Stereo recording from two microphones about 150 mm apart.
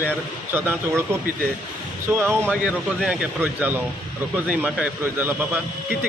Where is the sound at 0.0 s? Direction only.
15° right (ahead or behind).